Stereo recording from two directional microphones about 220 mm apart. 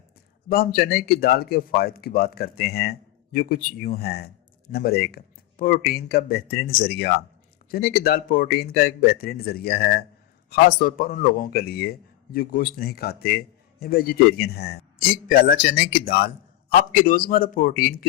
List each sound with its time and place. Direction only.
0.4 s speech: 40° left (ahead or behind)